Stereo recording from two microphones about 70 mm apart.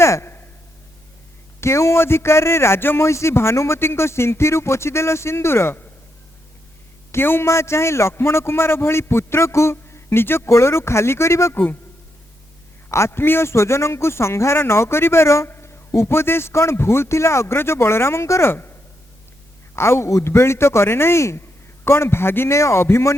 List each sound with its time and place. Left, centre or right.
0.0 s a sound: left
1.6 s a man's voice: left
7.1 s a man's voice: left
11.5 s speech: left
12.9 s a man's voice: left